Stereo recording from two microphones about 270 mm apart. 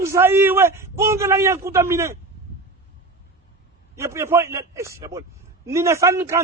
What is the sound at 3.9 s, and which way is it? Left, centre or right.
A man's voice, centre.